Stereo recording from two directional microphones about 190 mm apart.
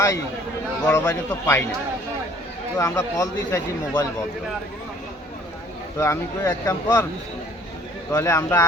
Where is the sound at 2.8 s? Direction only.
15° left (ahead or behind).